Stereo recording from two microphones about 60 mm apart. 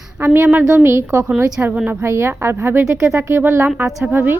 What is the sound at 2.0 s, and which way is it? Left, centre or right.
A woman's voice, right.